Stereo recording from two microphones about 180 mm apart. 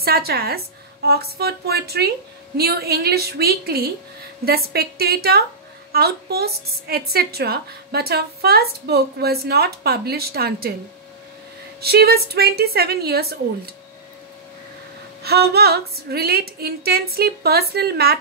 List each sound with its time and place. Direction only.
0.0 s a woman's voice: 60° right (ahead or behind)
11.8 s a woman's voice: 60° right (ahead or behind)
15.2 s a woman's voice: 60° right (ahead or behind)